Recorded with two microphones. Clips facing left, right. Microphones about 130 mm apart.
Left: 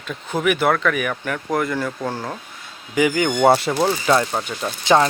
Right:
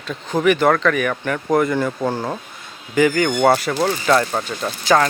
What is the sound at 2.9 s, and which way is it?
Speech, 15° left (ahead or behind).